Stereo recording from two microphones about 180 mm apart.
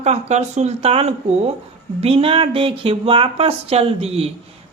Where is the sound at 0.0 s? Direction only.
35° right (ahead or behind).